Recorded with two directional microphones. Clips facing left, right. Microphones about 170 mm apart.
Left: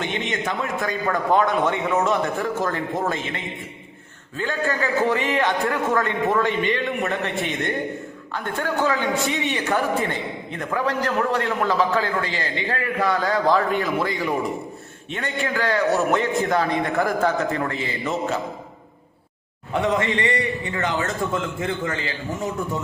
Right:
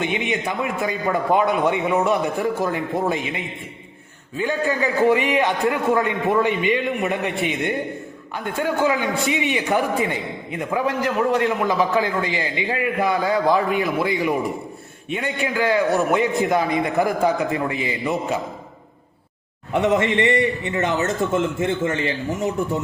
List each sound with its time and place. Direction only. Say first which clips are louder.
0.0 s a man's voice: right 3 dB; 15° right (ahead or behind)
19.8 s a man's voice: right 4 dB; 25° right (ahead or behind)